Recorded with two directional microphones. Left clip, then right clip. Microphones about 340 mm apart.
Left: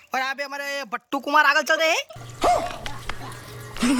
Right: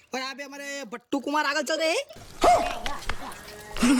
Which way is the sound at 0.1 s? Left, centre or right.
Centre.